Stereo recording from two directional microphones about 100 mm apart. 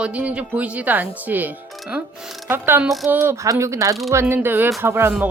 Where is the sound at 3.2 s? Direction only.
30° right (ahead or behind).